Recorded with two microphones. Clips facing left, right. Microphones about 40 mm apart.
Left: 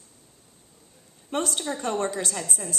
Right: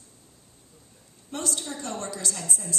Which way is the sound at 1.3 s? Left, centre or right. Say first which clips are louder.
Left 5 dB; left.